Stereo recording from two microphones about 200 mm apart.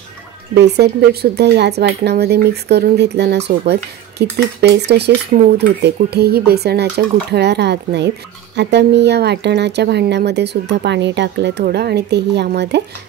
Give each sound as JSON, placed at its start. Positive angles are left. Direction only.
{"t": 0.6, "sound": "speech", "side_deg": -55}